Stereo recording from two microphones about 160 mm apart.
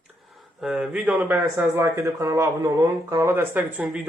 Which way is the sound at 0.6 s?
5° right (ahead or behind).